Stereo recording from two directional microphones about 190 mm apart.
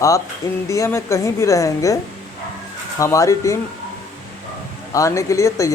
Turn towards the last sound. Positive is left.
turn(degrees=15)  # may be behind; listen again after turning